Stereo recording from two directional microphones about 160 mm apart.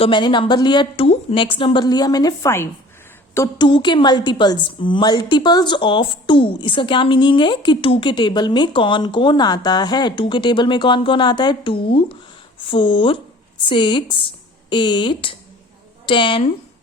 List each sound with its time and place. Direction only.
0.0 s a woman's voice: 30° left (ahead or behind)